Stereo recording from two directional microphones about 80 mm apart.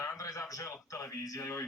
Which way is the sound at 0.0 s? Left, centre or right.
Left.